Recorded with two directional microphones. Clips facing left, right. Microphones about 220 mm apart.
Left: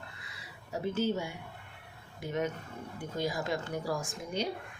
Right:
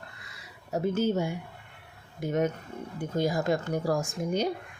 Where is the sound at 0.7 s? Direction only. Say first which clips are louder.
Right 5 dB; 45° right (ahead or behind).